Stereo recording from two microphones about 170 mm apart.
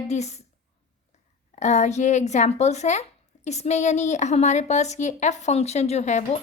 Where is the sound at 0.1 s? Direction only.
40° left (ahead or behind).